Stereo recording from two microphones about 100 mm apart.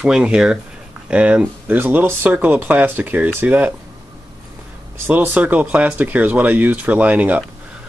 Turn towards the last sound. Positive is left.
turn(degrees=-15)  # may be behind; listen again after turning